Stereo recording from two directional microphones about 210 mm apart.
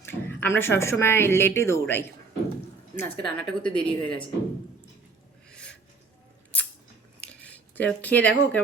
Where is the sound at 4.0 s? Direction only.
5° left (ahead or behind).